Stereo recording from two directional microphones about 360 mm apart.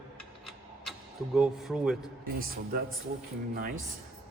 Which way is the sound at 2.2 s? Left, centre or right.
Right.